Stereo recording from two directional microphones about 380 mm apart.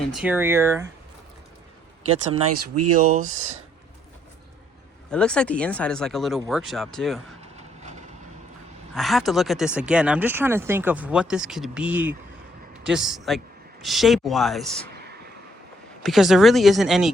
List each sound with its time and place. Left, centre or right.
0.1 s speech: centre
2.3 s speech: right
5.1 s speech: centre
7.5 s vehicle: centre
9.0 s speech: centre
16.0 s speech: centre